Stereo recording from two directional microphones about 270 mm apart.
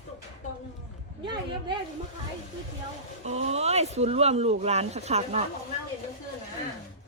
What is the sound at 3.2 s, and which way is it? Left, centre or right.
Speech, right.